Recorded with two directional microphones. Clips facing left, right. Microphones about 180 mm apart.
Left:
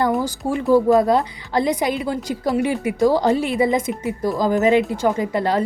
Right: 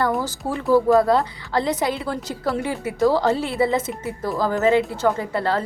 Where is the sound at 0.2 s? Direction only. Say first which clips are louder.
Left 4 dB; 15° left (ahead or behind).